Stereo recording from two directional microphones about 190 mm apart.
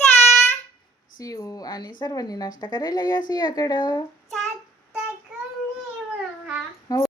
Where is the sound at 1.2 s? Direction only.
20° left (ahead or behind).